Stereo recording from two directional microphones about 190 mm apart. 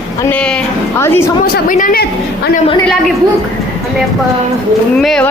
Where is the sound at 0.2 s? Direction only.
10° left (ahead or behind).